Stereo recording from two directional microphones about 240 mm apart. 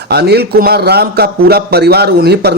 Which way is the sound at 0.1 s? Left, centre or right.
Right.